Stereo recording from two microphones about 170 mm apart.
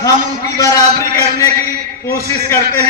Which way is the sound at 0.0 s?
20° left (ahead or behind).